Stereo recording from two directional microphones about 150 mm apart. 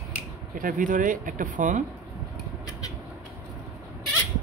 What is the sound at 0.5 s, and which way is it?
Speech, 65° right (ahead or behind).